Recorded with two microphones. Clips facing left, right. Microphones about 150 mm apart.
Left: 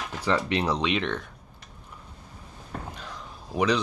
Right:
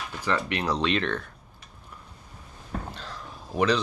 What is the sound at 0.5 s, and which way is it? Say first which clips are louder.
Speech: left 2 dB; 25° left (ahead or behind).